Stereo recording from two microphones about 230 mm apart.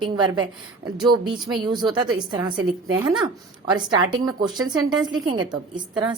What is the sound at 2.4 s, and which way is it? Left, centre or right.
Speech, centre.